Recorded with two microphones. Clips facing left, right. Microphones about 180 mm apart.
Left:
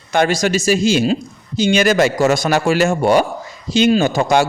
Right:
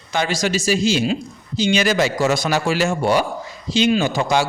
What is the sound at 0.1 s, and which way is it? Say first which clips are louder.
A man's voice: left 5 dB; 50° left (ahead or behind).